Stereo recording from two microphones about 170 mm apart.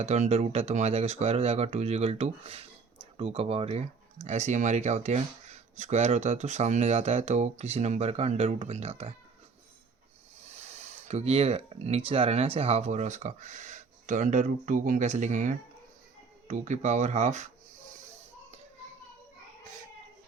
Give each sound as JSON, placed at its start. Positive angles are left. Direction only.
{"t": 0.0, "sound": "speech", "side_deg": -40}
{"t": 10.4, "sound": "speech", "side_deg": -40}